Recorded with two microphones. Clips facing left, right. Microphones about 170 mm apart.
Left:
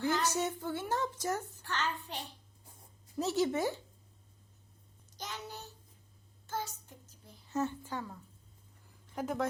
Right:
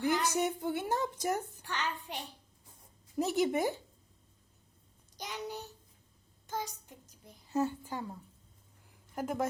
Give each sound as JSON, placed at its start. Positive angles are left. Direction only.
{"t": 0.0, "sound": "a woman's voice", "side_deg": -15}
{"t": 5.1, "sound": "a woman's voice", "side_deg": -15}
{"t": 9.1, "sound": "a woman's voice", "side_deg": -10}